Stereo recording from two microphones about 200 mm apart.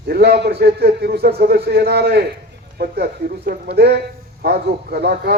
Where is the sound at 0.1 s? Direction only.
55° right (ahead or behind).